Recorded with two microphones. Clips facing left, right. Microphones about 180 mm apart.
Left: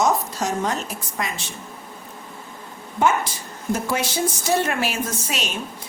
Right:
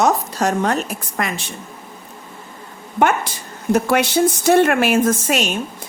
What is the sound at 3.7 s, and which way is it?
A woman's voice, 65° right (ahead or behind).